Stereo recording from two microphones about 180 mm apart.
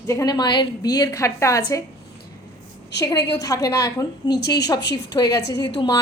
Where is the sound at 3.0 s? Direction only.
20° left (ahead or behind).